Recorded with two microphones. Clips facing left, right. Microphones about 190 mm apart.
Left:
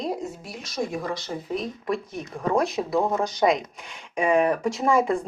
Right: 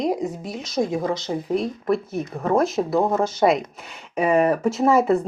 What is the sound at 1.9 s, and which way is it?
Speech, 5° right (ahead or behind).